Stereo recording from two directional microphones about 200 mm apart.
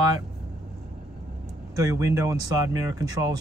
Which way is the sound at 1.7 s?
15° right (ahead or behind).